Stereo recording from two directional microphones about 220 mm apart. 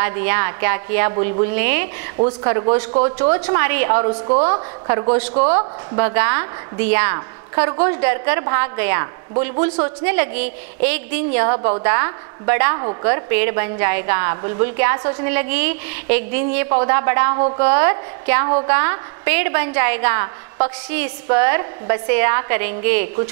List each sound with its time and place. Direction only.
0.0 s a woman's voice: 15° right (ahead or behind)
3.3 s a woman's voice: 15° right (ahead or behind)
5.3 s speech: 30° right (ahead or behind)
5.9 s a woman's voice: 15° right (ahead or behind)
13.3 s a woman's voice: 15° right (ahead or behind)